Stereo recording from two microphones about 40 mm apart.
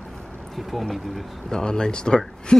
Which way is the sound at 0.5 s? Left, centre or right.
Centre.